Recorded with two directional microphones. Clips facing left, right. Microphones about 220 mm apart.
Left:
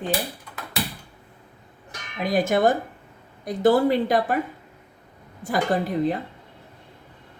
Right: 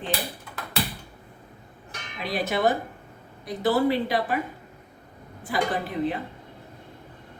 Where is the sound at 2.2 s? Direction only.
45° left (ahead or behind).